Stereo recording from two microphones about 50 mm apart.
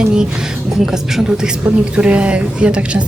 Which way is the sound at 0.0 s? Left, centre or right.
Centre.